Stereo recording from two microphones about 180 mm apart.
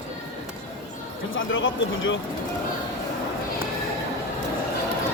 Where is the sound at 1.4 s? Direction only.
90° left.